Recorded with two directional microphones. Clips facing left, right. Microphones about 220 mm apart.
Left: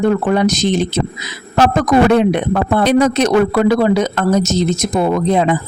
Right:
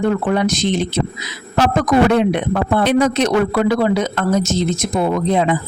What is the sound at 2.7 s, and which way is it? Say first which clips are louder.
Speech: left 2 dB; 40° left (ahead or behind).